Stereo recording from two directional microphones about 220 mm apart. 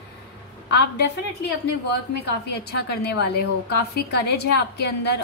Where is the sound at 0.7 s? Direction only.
50° left (ahead or behind).